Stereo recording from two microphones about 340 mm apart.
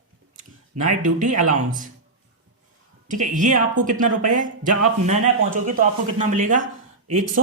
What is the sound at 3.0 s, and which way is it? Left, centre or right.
A man's voice, right.